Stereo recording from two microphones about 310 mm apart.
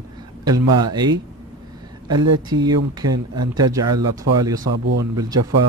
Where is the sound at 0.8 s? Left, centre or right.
Centre.